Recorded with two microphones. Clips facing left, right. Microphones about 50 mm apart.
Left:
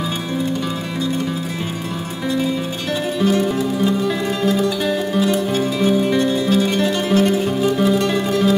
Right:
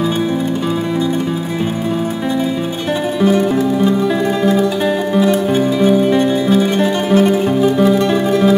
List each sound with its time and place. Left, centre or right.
3.2 s music: centre